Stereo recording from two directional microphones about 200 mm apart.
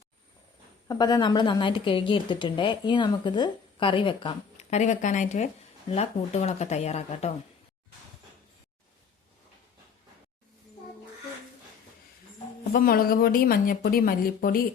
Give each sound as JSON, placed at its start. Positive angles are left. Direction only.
{"t": 0.9, "sound": "a woman's voice", "side_deg": 20}
{"t": 12.7, "sound": "speech", "side_deg": 45}